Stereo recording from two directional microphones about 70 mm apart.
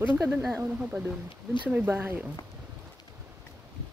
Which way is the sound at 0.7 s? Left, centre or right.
Right.